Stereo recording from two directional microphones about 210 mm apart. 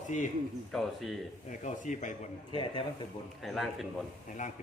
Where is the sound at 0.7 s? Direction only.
Centre (ahead or behind).